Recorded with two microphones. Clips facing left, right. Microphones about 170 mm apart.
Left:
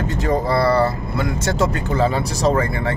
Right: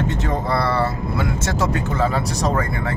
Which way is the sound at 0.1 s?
Centre (ahead or behind).